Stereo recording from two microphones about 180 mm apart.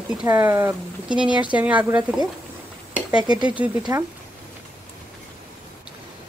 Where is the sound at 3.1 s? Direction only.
25° right (ahead or behind).